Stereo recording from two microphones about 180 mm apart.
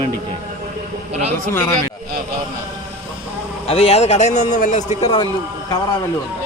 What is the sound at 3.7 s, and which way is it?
A man's voice, 35° left (ahead or behind).